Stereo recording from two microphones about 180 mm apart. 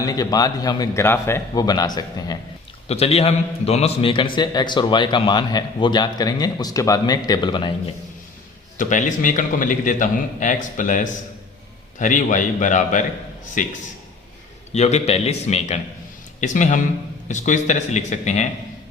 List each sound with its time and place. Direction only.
0.0 s a man's voice: 20° left (ahead or behind)
2.9 s a man's voice: 35° left (ahead or behind)
8.8 s a man's voice: 45° left (ahead or behind)